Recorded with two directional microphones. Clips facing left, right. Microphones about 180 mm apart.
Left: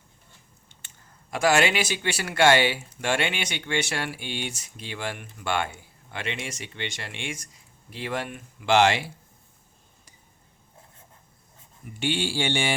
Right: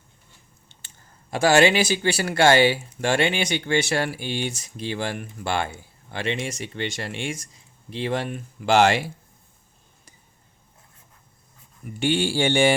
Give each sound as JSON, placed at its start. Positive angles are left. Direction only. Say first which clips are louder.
{"t": 1.3, "sound": "speech", "louder": "right 5 dB", "side_deg": -30}
{"t": 11.9, "sound": "speech", "louder": "right 5 dB", "side_deg": -50}